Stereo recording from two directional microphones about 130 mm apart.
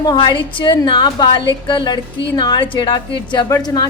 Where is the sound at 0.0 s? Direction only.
35° left (ahead or behind).